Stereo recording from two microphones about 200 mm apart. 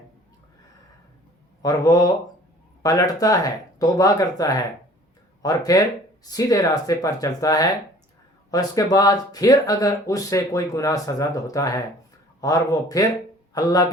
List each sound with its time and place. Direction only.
1.6 s speech: 20° left (ahead or behind)